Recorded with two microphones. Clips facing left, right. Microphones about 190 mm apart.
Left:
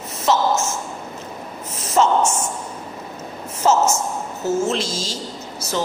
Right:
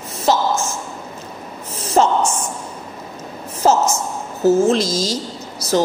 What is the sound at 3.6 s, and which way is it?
A woman's voice, 40° right (ahead or behind).